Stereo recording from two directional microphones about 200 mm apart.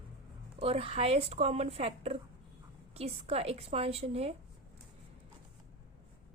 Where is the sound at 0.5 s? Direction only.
30° right (ahead or behind).